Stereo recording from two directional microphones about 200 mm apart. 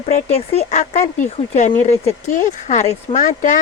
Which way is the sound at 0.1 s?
30° left (ahead or behind).